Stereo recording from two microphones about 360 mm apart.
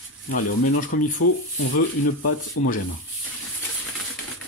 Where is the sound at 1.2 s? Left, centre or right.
Left.